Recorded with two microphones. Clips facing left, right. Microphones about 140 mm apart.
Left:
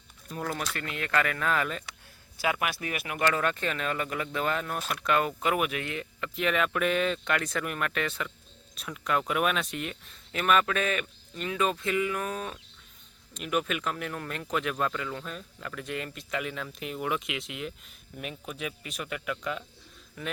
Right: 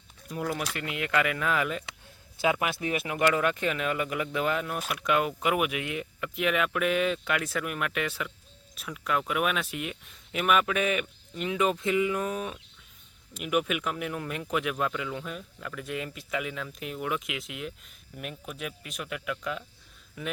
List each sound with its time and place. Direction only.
0.3 s speech: 15° right (ahead or behind)
2.4 s speech: 25° right (ahead or behind); by 20.3 s 5° right (ahead or behind)